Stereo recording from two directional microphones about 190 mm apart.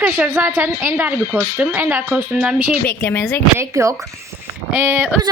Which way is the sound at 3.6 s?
15° right (ahead or behind).